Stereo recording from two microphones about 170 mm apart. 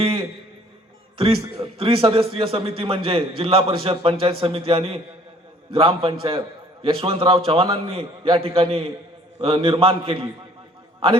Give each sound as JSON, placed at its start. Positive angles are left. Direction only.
{"t": 0.0, "sound": "music", "side_deg": -35}
{"t": 1.2, "sound": "a man's voice", "side_deg": -35}